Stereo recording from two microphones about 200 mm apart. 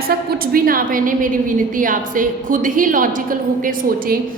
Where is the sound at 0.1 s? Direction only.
50° right (ahead or behind).